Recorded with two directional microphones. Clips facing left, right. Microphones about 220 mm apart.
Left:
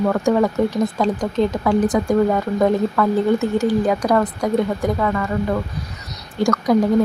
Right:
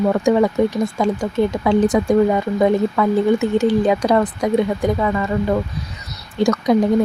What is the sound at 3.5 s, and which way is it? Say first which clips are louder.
Speech: right 2 dB; 25° right (ahead or behind).